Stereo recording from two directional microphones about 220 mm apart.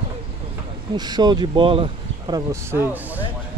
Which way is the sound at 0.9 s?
20° right (ahead or behind).